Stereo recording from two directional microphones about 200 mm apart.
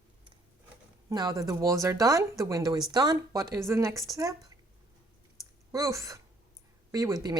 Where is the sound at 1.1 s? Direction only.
20° right (ahead or behind).